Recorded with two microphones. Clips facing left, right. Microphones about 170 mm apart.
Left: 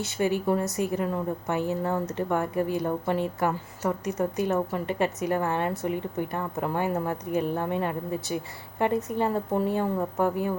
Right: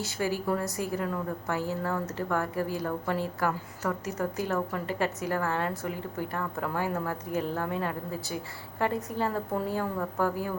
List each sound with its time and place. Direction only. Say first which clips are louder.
0.0 s a woman's voice: left 4 dB; 20° left (ahead or behind)